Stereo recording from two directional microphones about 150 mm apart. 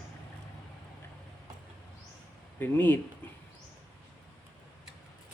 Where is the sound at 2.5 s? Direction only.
15° left (ahead or behind).